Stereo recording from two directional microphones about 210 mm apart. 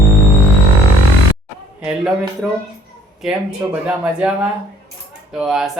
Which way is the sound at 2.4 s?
5° right (ahead or behind).